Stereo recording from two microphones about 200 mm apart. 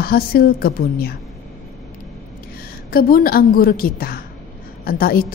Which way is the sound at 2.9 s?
45° left (ahead or behind).